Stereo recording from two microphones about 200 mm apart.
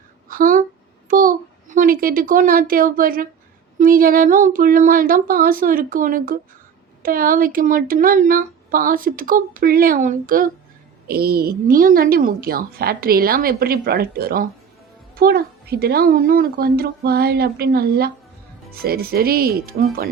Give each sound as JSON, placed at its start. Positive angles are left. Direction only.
{"t": 0.3, "sound": "speech", "side_deg": -45}
{"t": 1.0, "sound": "a sound", "side_deg": -45}
{"t": 3.8, "sound": "speech", "side_deg": -45}